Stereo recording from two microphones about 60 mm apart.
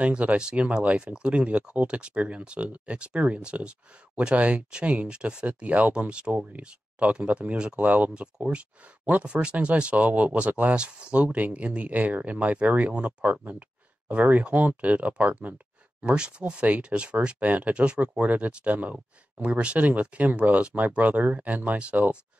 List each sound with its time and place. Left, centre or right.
0.0 s speech: right